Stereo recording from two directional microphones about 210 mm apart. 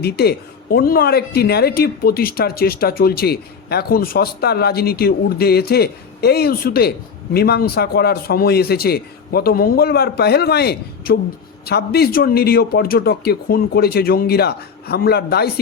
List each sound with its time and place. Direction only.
0.0 s speech: 50° left (ahead or behind)